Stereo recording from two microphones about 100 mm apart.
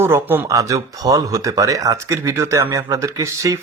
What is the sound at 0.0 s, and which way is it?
Speech, 25° right (ahead or behind).